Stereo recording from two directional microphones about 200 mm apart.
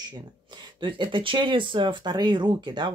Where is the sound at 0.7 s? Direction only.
25° right (ahead or behind).